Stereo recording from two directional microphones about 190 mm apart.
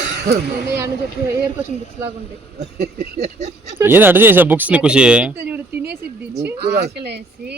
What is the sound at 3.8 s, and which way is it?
Speech, 10° right (ahead or behind).